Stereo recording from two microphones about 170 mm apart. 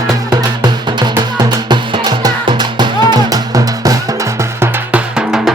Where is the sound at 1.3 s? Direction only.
25° right (ahead or behind).